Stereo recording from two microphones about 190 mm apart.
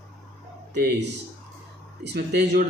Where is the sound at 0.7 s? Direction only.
60° right (ahead or behind).